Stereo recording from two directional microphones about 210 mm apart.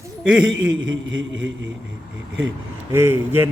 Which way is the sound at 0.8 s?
65° right (ahead or behind).